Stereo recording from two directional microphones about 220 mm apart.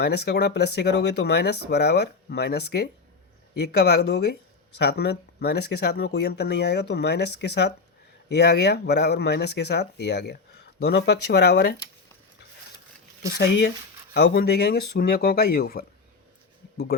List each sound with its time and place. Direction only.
0.0 s speech: 50° left (ahead or behind)
13.2 s speech: 50° left (ahead or behind)